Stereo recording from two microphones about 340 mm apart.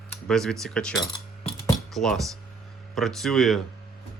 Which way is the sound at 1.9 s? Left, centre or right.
Centre.